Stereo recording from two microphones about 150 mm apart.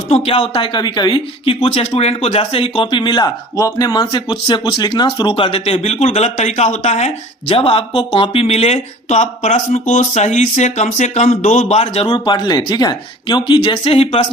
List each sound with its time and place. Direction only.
0.1 s speech: 45° left (ahead or behind)
12.0 s speech: 30° left (ahead or behind)